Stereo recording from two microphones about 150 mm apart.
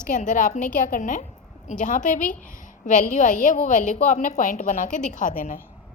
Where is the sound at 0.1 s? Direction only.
60° left (ahead or behind).